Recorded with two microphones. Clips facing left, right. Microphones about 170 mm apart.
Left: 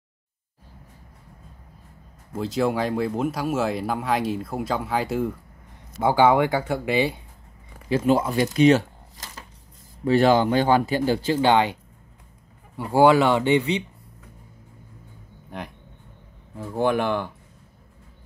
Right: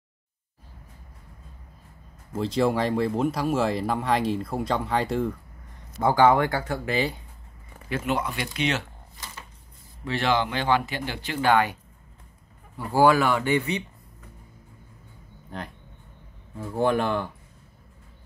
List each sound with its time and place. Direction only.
2.3 s speech: centre (ahead or behind)
7.9 s speech: 30° left (ahead or behind)
11.4 s speech: 20° left (ahead or behind)
12.7 s speech: 20° left (ahead or behind)
16.5 s speech: 5° left (ahead or behind)